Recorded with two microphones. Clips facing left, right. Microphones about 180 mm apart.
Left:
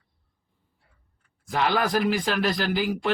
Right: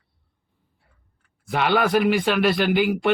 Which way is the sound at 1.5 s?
65° right (ahead or behind).